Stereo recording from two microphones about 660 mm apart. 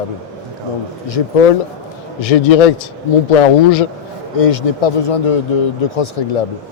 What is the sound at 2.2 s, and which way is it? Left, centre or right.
Speech, left.